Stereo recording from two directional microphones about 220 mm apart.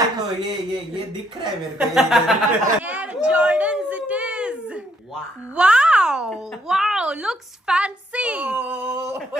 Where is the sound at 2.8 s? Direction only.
5° right (ahead or behind).